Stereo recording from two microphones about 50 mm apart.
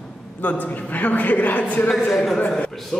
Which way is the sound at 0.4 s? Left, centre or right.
Left.